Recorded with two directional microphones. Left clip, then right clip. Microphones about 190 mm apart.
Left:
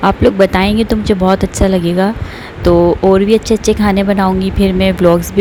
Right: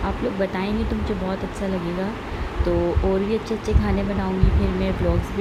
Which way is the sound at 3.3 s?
50° left (ahead or behind).